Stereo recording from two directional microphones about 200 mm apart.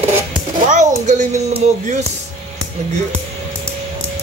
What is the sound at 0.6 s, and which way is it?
A woman's voice, 35° right (ahead or behind).